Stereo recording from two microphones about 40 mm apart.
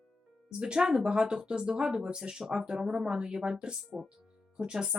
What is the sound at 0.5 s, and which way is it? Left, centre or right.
Speech, right.